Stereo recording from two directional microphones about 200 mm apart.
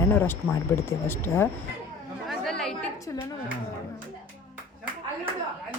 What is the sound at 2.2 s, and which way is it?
Chatter, centre (ahead or behind).